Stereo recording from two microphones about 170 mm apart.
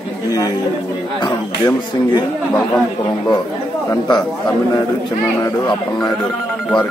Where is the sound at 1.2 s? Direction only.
25° left (ahead or behind).